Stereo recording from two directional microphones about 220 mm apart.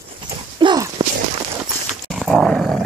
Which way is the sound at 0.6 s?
20° right (ahead or behind).